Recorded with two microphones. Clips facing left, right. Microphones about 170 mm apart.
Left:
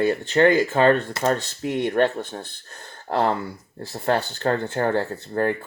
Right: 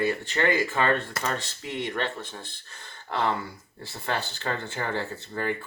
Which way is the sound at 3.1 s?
35° left (ahead or behind).